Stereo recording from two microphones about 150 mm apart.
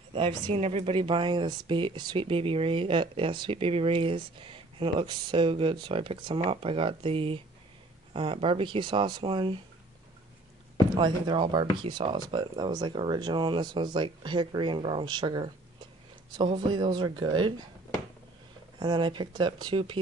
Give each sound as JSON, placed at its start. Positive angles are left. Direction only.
{"t": 0.1, "sound": "speech", "side_deg": -30}
{"t": 0.6, "sound": "speech", "side_deg": -45}
{"t": 11.0, "sound": "speech", "side_deg": -30}
{"t": 18.8, "sound": "speech", "side_deg": -30}